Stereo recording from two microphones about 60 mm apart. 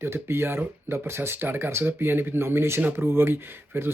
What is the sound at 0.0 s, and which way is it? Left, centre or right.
Speech, right.